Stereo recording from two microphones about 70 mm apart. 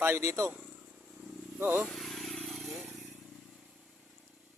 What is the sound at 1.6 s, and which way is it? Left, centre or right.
Speech, right.